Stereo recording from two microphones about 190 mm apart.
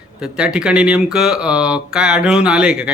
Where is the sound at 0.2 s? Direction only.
5° right (ahead or behind).